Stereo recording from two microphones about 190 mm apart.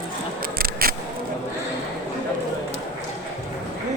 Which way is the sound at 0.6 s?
50° right (ahead or behind).